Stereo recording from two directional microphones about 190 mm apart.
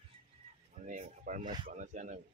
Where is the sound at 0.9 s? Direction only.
40° right (ahead or behind).